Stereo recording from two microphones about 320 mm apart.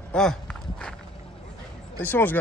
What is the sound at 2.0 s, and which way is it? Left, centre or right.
Speech, centre.